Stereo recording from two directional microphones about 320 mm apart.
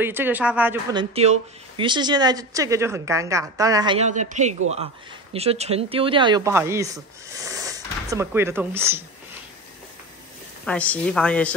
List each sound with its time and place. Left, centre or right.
0.0 s speech: centre
1.1 s speech: centre
10.6 s a woman's voice: centre